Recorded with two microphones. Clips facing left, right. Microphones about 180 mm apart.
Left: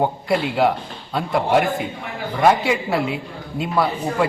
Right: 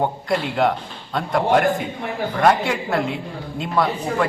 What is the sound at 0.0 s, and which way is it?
A man's voice, 5° left (ahead or behind).